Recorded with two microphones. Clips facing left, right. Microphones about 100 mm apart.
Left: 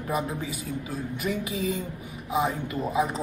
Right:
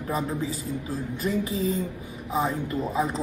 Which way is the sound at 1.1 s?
30° right (ahead or behind).